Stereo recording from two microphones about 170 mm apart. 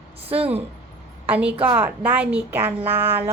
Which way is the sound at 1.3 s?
10° right (ahead or behind).